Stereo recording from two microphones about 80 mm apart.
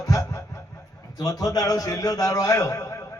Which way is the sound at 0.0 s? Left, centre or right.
Left.